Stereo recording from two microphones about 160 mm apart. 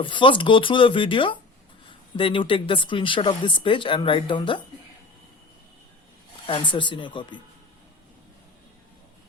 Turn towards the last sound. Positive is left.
turn(degrees=30)  # may be behind; listen again after turning